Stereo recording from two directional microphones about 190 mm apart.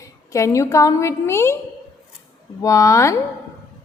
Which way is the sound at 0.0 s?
15° left (ahead or behind).